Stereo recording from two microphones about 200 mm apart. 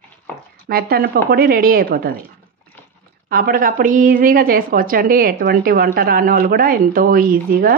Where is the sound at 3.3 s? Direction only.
45° right (ahead or behind).